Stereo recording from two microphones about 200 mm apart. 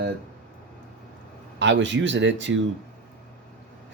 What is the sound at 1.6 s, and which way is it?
Speech, 65° right (ahead or behind).